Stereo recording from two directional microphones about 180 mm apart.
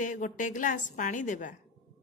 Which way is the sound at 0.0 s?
45° left (ahead or behind).